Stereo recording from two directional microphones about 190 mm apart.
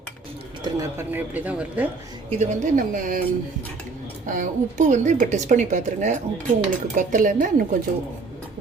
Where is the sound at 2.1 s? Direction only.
35° right (ahead or behind).